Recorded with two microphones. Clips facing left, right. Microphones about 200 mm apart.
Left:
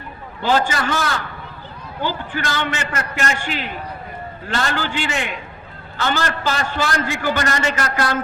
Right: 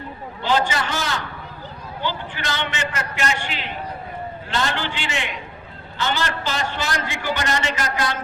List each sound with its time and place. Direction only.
0.7 s a man's voice: 55° left (ahead or behind)